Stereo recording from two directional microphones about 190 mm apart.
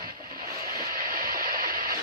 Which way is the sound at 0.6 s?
50° right (ahead or behind).